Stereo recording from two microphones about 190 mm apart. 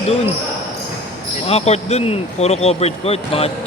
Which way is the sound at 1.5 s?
35° left (ahead or behind).